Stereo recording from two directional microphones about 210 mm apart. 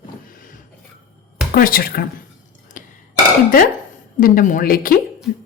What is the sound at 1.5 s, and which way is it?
Speech, 45° left (ahead or behind).